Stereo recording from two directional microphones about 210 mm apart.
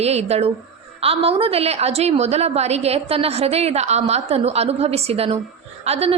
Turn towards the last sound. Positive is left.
turn(degrees=-30)  # may be behind; listen again after turning